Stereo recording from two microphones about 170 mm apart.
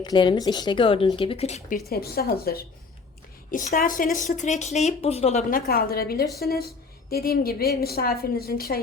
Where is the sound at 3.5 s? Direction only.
50° left (ahead or behind).